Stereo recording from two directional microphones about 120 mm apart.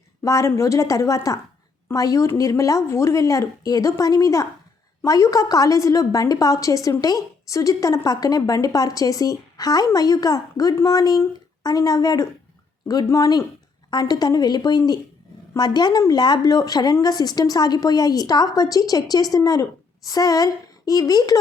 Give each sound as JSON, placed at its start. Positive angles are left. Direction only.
{"t": 0.2, "sound": "a woman's voice", "side_deg": 25}